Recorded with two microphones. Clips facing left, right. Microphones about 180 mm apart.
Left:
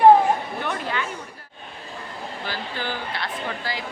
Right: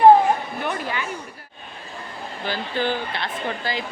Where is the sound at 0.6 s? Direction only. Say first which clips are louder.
Right 1 dB; 5° right (ahead or behind).